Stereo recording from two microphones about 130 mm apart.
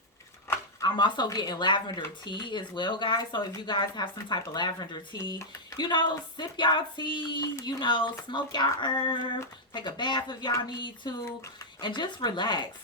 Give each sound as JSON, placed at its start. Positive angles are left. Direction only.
{"t": 0.4, "sound": "speech", "side_deg": 30}